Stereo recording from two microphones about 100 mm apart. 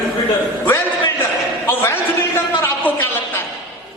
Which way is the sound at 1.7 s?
25° left (ahead or behind).